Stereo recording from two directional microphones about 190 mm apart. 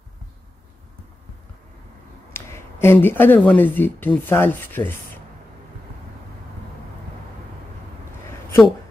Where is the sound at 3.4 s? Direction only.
10° left (ahead or behind).